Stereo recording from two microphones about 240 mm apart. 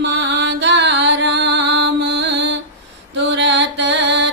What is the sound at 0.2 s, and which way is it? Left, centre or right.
Music, right.